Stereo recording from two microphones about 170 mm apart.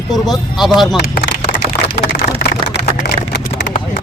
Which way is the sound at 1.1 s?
60° left (ahead or behind).